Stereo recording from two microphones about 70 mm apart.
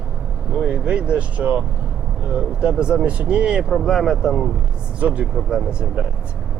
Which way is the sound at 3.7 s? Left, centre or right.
Centre.